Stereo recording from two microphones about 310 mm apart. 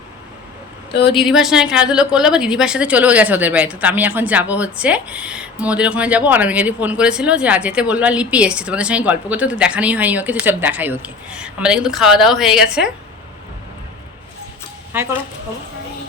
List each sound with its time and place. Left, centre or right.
1.1 s a woman's voice: centre
14.9 s speech: centre